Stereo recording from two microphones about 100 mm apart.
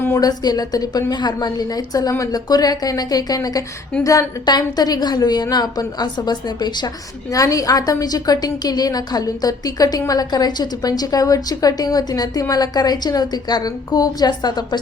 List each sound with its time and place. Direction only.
0.2 s a woman's voice: 40° left (ahead or behind)